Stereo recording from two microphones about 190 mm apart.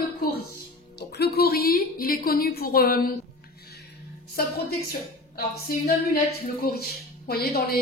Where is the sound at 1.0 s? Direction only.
60° left (ahead or behind).